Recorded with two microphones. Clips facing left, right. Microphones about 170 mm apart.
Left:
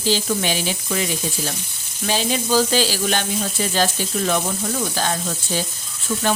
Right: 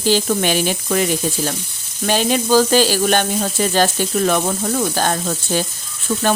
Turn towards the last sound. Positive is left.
turn(degrees=-40)  # may be behind; listen again after turning